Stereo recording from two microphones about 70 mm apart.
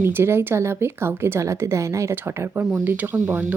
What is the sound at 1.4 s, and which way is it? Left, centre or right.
Speech, right.